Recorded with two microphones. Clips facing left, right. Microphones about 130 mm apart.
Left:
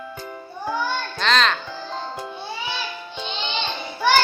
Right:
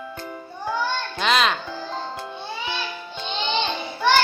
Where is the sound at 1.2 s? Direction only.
10° right (ahead or behind).